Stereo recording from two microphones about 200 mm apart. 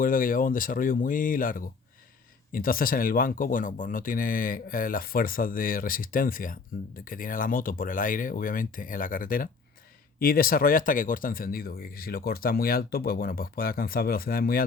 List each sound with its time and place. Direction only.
0.0 s speech: 45° left (ahead or behind)